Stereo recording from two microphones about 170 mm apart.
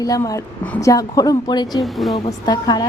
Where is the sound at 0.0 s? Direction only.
20° left (ahead or behind).